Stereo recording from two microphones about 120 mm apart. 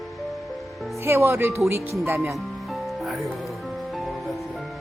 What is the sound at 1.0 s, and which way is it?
Speech, 25° right (ahead or behind).